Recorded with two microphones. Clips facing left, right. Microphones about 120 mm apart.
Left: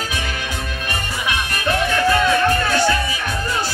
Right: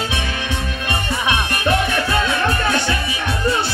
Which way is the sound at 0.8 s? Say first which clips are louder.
Right 4 dB; 25° right (ahead or behind).